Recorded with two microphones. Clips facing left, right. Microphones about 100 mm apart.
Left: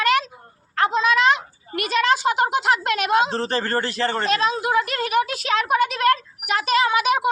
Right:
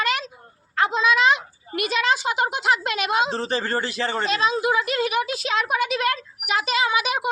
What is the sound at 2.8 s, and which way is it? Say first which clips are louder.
Speech: left 3 dB; 50° left (ahead or behind).